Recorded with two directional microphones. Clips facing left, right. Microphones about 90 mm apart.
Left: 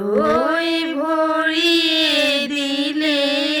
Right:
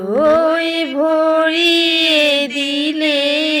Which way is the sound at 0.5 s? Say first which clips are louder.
Right 2 dB; 45° right (ahead or behind).